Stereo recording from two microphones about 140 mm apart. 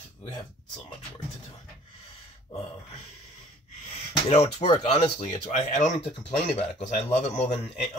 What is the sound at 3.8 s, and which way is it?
Speech, 50° left (ahead or behind).